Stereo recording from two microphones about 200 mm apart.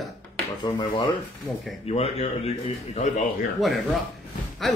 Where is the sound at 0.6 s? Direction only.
20° left (ahead or behind).